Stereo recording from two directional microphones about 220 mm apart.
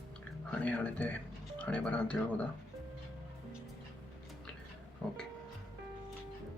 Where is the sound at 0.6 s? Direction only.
5° left (ahead or behind).